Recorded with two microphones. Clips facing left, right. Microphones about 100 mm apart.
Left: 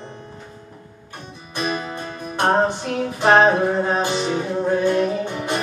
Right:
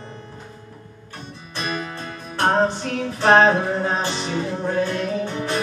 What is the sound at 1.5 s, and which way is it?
Music, 15° left (ahead or behind).